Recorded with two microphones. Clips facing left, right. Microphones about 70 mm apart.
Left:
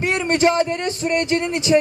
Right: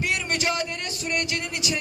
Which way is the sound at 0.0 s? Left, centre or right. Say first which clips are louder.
Left 9 dB; left.